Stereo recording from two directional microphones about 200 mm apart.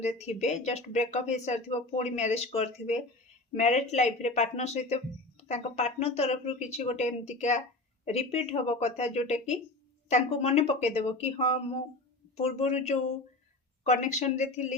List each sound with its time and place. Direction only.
0.0 s speech: 35° left (ahead or behind)